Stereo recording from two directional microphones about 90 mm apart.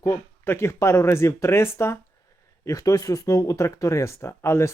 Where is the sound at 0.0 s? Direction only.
30° left (ahead or behind).